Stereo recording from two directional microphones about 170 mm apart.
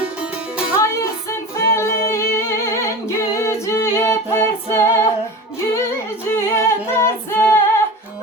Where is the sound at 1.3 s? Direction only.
15° left (ahead or behind).